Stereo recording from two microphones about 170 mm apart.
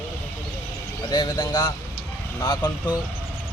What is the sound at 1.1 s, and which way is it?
Speech, 25° left (ahead or behind).